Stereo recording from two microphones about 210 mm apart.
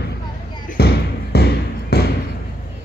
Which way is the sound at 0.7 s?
50° left (ahead or behind).